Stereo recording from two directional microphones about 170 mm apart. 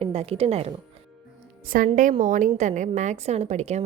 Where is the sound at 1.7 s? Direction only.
55° right (ahead or behind).